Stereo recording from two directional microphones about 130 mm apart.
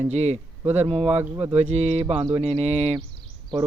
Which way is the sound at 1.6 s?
55° right (ahead or behind).